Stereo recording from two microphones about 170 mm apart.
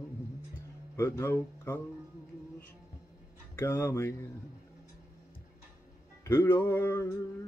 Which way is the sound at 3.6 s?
15° left (ahead or behind).